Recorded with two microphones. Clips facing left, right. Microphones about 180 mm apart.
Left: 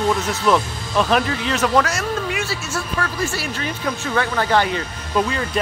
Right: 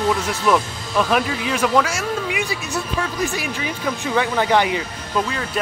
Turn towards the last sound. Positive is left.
turn(degrees=0)  # may be behind; listen again after turning